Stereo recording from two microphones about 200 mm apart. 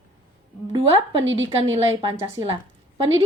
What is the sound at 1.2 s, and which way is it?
Speech, 70° right (ahead or behind).